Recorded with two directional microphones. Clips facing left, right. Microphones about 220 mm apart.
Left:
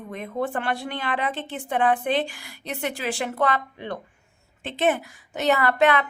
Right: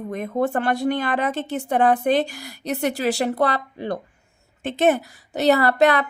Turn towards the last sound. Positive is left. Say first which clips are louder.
# right 3 dB
turn(degrees=-40)  # may be behind; listen again after turning